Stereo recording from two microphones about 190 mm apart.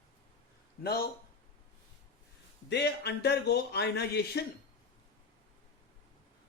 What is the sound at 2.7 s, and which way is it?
Speech, 60° left (ahead or behind).